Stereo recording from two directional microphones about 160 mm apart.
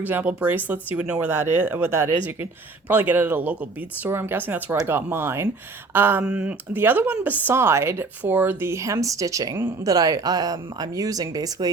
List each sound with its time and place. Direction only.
0.0 s speech: 10° right (ahead or behind)